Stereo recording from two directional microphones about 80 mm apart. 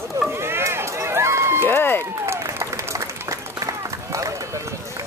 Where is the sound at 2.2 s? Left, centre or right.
Right.